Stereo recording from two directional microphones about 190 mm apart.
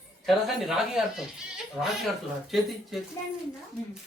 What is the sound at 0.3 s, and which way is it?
Speech, centre (ahead or behind).